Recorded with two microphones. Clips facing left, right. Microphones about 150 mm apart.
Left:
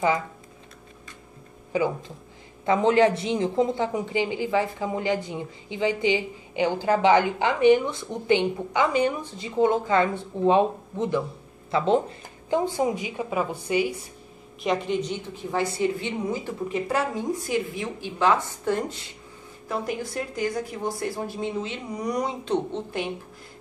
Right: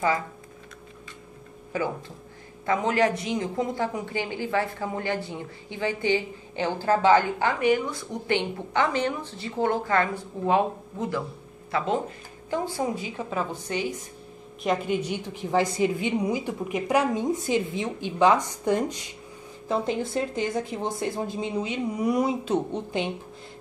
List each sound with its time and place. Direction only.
1.7 s a woman's voice: 15° left (ahead or behind)
14.6 s a woman's voice: 5° right (ahead or behind)